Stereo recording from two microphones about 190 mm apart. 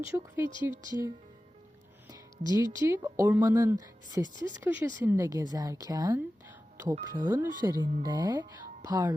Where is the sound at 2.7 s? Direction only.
15° right (ahead or behind).